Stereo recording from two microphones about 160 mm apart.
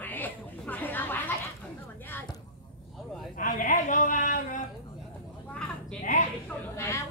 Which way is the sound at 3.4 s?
55° left (ahead or behind).